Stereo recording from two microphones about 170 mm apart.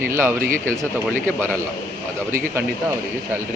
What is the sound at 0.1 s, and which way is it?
Speech, 15° right (ahead or behind).